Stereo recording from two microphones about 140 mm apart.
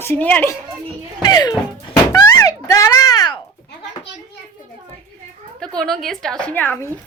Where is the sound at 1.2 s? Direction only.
30° left (ahead or behind).